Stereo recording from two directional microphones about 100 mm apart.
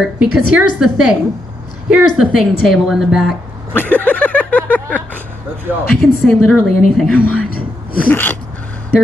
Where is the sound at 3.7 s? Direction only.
15° left (ahead or behind).